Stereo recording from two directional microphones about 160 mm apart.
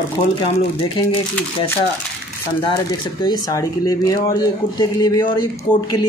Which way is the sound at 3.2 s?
25° left (ahead or behind).